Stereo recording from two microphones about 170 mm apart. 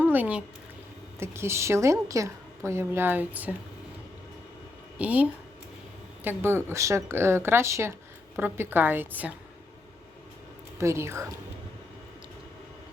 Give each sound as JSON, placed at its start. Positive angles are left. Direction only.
{"t": 0.0, "sound": "speech", "side_deg": -10}
{"t": 4.9, "sound": "speech", "side_deg": -10}
{"t": 10.8, "sound": "speech", "side_deg": -15}